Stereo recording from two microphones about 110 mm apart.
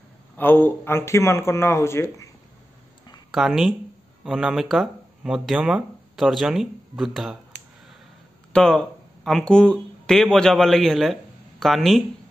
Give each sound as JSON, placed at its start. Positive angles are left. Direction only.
{"t": 0.4, "sound": "speech", "side_deg": 20}
{"t": 3.3, "sound": "speech", "side_deg": 0}
{"t": 8.5, "sound": "speech", "side_deg": 5}